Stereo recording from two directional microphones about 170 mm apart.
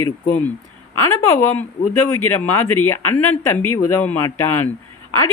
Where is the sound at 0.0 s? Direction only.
10° left (ahead or behind).